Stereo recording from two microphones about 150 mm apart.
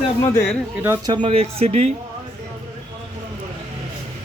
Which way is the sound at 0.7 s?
15° right (ahead or behind).